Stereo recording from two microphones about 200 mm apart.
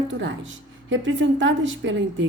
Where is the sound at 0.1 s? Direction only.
70° right (ahead or behind).